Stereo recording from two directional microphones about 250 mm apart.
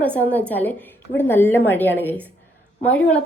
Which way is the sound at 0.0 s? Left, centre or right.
Centre.